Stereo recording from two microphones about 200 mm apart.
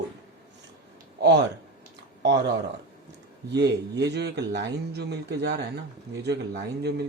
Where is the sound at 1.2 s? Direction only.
60° right (ahead or behind).